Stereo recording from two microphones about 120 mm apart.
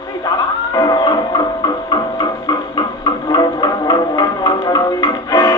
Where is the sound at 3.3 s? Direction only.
35° left (ahead or behind).